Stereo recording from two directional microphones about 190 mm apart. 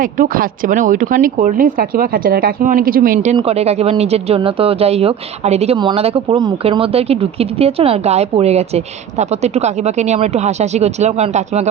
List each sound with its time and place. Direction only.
0.0 s speech: 50° right (ahead or behind)
3.3 s speech: 30° right (ahead or behind)